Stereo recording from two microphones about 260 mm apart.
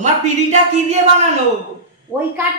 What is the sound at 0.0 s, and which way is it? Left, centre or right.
Speech, right.